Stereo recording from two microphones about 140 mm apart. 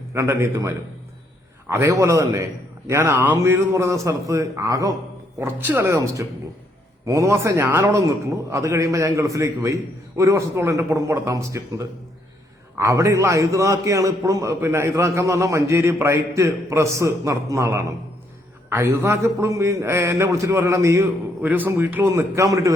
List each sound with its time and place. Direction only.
0.1 s a man's voice: 15° right (ahead or behind)